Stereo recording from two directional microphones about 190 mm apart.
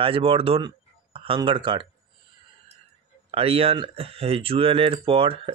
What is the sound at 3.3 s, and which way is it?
Speech, 30° right (ahead or behind).